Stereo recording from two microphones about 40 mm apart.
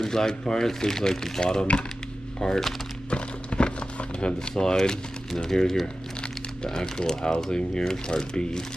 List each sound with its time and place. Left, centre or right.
0.0 s speech: centre
2.4 s speech: centre
3.1 s clip-clop: left
4.6 s speech: centre